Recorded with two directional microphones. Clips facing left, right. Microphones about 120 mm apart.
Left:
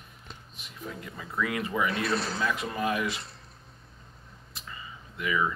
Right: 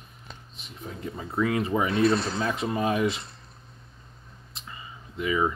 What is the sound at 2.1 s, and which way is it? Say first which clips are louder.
Speech: right 4 dB; 5° left (ahead or behind).